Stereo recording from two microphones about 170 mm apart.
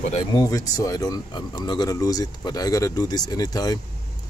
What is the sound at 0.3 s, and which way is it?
Speech, 20° left (ahead or behind).